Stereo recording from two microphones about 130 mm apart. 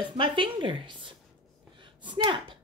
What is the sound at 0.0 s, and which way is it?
Speech, 40° right (ahead or behind).